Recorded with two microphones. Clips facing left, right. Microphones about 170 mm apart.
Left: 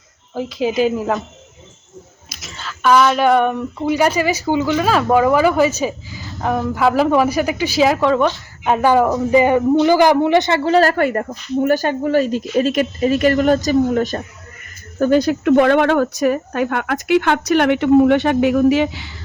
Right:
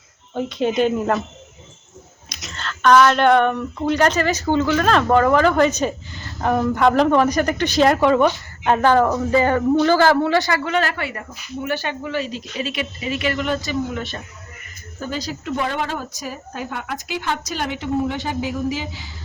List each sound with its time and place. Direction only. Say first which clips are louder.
0.3 s speech: left 1 dB; centre (ahead or behind)
2.3 s a man's voice: right 1 dB; centre (ahead or behind); by 14.3 s 40° left (ahead or behind)
14.9 s speech: left 13 dB; 60° left (ahead or behind)